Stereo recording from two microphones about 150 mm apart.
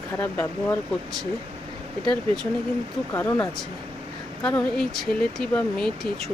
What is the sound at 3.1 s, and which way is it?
Speech, 15° left (ahead or behind).